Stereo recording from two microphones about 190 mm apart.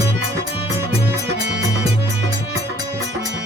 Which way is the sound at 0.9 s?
60° right (ahead or behind).